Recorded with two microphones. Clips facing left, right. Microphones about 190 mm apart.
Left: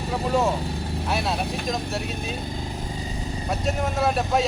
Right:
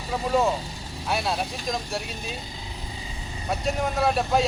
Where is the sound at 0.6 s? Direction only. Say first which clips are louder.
Left 8 dB; 60° left (ahead or behind).